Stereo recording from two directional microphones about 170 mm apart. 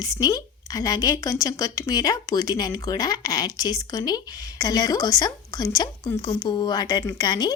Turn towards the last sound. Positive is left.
turn(degrees=25)  # may be behind; listen again after turning